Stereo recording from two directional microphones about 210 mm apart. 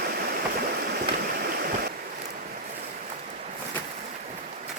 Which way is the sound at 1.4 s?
45° right (ahead or behind).